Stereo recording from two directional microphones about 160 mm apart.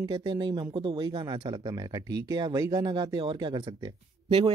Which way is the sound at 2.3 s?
25° right (ahead or behind).